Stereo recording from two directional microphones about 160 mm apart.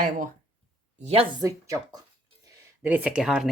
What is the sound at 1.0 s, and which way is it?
Speech, 35° right (ahead or behind).